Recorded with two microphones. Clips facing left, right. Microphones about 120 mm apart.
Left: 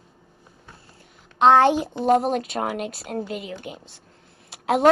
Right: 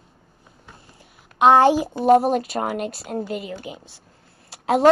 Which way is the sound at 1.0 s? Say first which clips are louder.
Right 1 dB; 10° right (ahead or behind).